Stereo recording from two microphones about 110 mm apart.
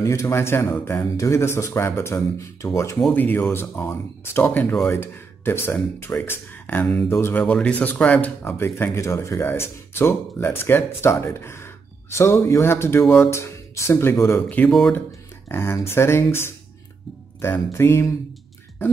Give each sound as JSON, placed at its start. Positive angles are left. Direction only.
{"t": 0.0, "sound": "speech", "side_deg": 25}
{"t": 14.7, "sound": "speech", "side_deg": 5}
{"t": 15.4, "sound": "speech", "side_deg": 20}